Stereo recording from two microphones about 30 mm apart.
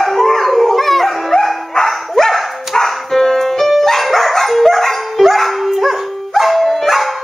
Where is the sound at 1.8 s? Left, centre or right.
Centre.